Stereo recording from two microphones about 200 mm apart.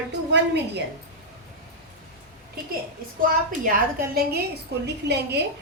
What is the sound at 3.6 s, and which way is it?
A woman's voice, 50° right (ahead or behind).